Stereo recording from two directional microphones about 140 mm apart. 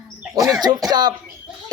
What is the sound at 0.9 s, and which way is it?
Speech, 30° right (ahead or behind).